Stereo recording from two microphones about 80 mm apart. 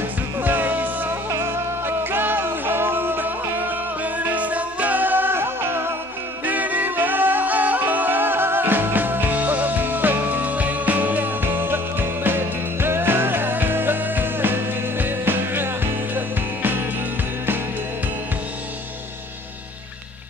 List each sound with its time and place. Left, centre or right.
0.4 s music: right